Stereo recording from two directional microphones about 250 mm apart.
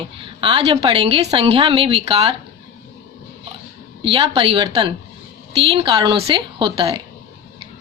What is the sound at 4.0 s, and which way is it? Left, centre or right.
A woman's voice, right.